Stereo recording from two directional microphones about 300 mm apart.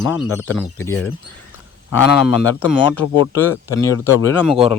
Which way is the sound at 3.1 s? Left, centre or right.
Centre.